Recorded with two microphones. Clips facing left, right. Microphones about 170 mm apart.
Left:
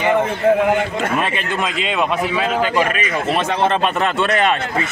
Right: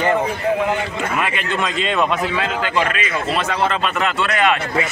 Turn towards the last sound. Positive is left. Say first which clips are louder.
# left 3 dB
turn(degrees=25)  # may be behind; listen again after turning